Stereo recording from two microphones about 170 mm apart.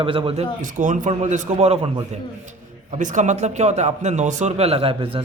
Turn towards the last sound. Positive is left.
turn(degrees=-35)  # may be behind; listen again after turning